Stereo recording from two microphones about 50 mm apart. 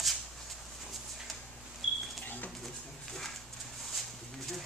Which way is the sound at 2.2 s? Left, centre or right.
Left.